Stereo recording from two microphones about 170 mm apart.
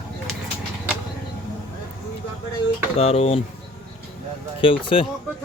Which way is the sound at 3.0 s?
35° left (ahead or behind).